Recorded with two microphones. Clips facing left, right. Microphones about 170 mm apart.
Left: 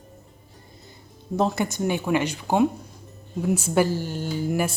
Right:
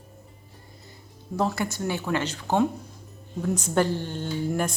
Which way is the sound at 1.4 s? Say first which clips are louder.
Left 3 dB; 20° left (ahead or behind).